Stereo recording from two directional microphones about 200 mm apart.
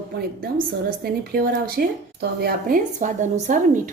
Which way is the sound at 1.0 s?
50° right (ahead or behind).